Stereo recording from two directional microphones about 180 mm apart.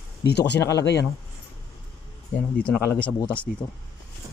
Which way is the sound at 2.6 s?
5° left (ahead or behind).